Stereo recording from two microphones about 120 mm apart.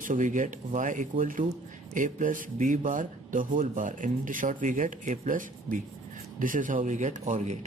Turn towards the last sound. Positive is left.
turn(degrees=-80)